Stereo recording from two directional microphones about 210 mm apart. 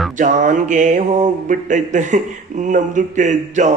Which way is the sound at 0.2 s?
35° right (ahead or behind).